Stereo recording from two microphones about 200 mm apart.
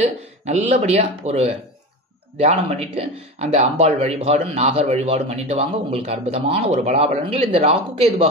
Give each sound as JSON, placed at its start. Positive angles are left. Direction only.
{"t": 0.5, "sound": "speech", "side_deg": -30}